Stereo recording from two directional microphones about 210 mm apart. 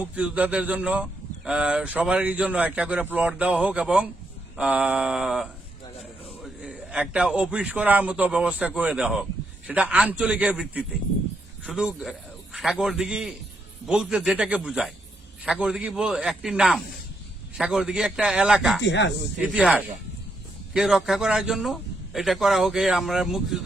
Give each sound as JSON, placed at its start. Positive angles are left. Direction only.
{"t": 0.0, "sound": "a man's voice", "side_deg": -5}
{"t": 18.8, "sound": "speech", "side_deg": 55}
{"t": 19.4, "sound": "a man's voice", "side_deg": -5}